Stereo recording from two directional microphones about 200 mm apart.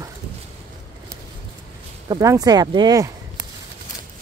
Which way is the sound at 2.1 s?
15° right (ahead or behind).